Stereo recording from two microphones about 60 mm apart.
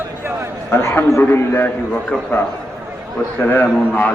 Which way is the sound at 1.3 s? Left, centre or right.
Left.